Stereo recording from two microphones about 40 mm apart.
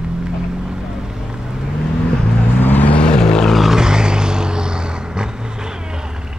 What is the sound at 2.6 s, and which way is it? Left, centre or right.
Vehicle, left.